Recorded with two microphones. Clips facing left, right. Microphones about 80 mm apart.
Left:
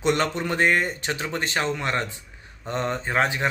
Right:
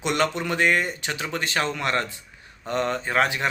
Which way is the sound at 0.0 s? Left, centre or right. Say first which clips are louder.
Left 1 dB; left.